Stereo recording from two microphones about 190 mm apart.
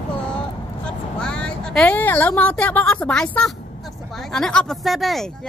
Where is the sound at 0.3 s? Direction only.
5° left (ahead or behind).